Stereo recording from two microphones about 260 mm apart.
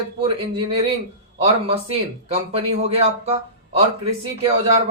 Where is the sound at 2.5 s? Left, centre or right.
Right.